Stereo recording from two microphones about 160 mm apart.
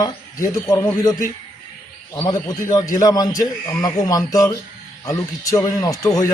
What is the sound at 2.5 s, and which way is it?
Speech, 20° left (ahead or behind).